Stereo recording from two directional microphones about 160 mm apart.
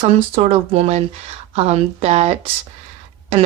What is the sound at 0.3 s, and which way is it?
Speech, 40° right (ahead or behind).